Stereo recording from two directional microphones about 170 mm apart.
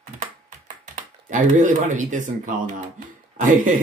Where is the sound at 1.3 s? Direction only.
45° right (ahead or behind).